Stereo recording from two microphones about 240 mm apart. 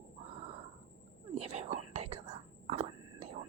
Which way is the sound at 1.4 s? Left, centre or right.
Right.